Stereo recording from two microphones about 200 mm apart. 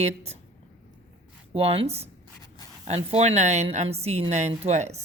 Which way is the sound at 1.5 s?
30° right (ahead or behind).